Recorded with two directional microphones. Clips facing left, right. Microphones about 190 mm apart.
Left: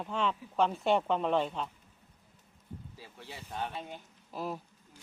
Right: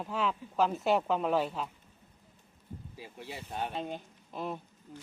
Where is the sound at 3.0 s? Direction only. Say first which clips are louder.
Right 4 dB; 15° right (ahead or behind).